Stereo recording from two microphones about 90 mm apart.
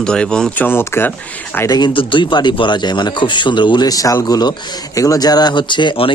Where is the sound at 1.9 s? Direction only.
70° left (ahead or behind).